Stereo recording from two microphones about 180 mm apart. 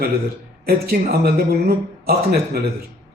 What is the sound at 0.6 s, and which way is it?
Speech, 60° right (ahead or behind).